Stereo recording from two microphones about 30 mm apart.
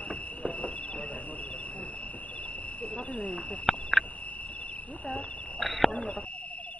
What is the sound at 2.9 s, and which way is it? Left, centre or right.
Cricket, left.